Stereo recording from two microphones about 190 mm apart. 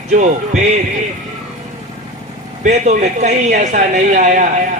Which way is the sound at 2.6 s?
40° right (ahead or behind).